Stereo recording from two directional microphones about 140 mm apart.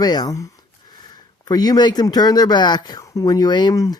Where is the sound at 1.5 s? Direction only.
30° left (ahead or behind).